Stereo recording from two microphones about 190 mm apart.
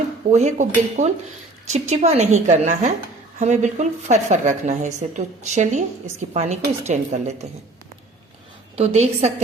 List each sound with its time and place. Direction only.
0.3 s a woman's voice: 40° right (ahead or behind)
8.7 s a woman's voice: 35° right (ahead or behind)